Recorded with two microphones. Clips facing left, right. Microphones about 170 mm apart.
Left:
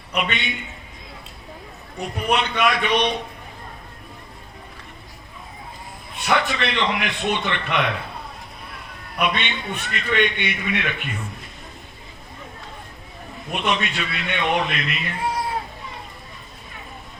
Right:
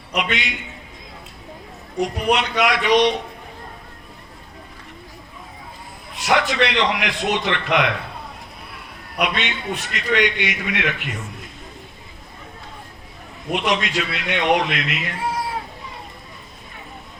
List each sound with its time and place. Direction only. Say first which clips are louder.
0.1 s a man's voice: right 1 dB; 90° right
2.0 s a man's voice: right 3 dB; 90° right
6.1 s a man's voice: right 3 dB; 90° right
9.2 s a man's voice: right 1 dB; 90° right
13.5 s a man's voice: right 3 dB; 90° right